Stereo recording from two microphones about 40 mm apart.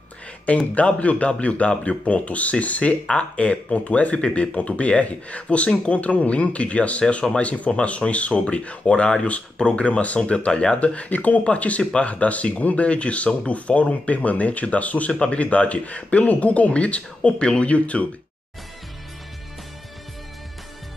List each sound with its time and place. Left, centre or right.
0.7 s speech: left
11.8 s speech: left
12.1 s speech: left
15.1 s speech: left